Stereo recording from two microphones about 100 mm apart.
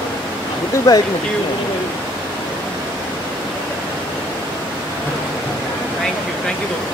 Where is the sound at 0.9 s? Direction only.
35° left (ahead or behind).